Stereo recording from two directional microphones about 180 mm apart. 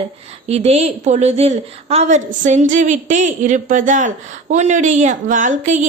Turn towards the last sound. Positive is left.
turn(degrees=-40)  # may be behind; listen again after turning